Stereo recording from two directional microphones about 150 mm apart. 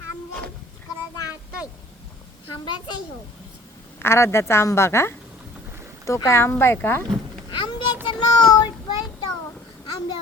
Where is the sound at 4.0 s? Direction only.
15° left (ahead or behind).